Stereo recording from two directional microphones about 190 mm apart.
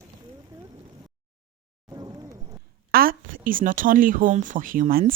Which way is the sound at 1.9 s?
20° right (ahead or behind).